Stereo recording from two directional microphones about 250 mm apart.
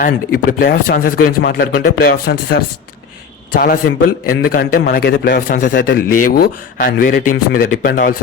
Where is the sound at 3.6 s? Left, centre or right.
Left.